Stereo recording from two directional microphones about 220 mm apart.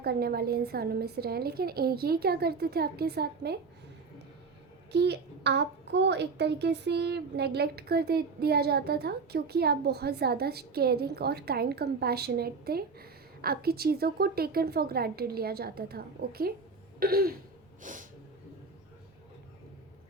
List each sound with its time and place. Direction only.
0.0 s a child's voice: 45° right (ahead or behind)
4.9 s a child's voice: 50° right (ahead or behind)